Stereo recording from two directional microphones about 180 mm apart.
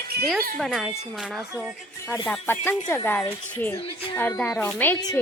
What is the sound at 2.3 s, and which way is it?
Speech, 10° left (ahead or behind).